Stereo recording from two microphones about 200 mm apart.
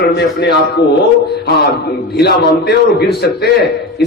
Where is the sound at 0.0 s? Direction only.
55° left (ahead or behind).